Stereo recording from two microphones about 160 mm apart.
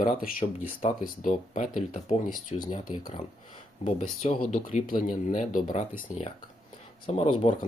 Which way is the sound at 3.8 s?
45° left (ahead or behind).